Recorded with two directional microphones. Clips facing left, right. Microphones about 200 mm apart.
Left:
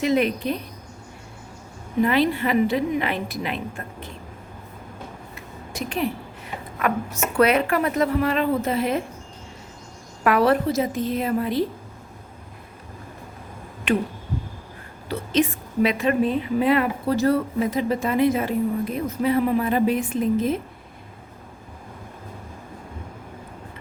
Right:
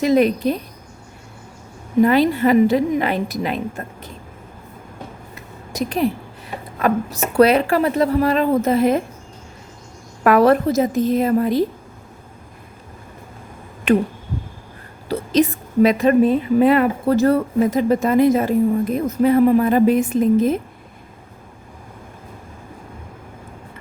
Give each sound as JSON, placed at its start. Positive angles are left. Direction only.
{"t": 0.0, "sound": "speech", "side_deg": -40}
{"t": 2.0, "sound": "speech", "side_deg": -40}
{"t": 5.3, "sound": "a sound", "side_deg": -40}
{"t": 6.7, "sound": "speech", "side_deg": -35}
{"t": 10.2, "sound": "a woman's voice", "side_deg": -45}
{"t": 13.9, "sound": "a woman's voice", "side_deg": -45}
{"t": 15.1, "sound": "a woman's voice", "side_deg": -40}